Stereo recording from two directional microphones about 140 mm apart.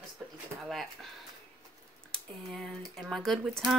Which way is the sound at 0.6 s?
Centre (ahead or behind).